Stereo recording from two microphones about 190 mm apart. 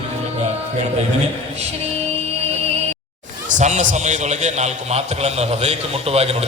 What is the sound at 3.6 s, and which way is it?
A man's voice, 40° right (ahead or behind).